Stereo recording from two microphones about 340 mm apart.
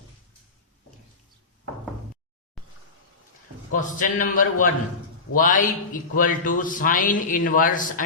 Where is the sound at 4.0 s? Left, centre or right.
Left.